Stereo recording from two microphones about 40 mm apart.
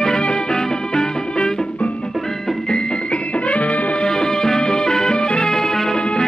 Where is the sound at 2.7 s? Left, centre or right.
Left.